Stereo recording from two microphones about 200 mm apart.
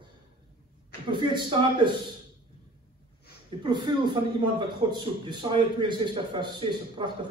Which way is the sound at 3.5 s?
20° right (ahead or behind).